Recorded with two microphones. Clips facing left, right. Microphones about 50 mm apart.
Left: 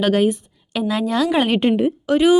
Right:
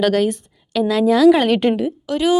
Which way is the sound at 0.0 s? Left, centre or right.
Centre.